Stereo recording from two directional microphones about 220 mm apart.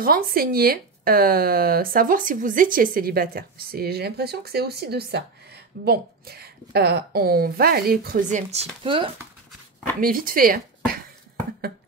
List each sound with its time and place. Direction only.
0.0 s speech: 40° right (ahead or behind); by 9.1 s 25° right (ahead or behind)
9.9 s speech: 40° right (ahead or behind)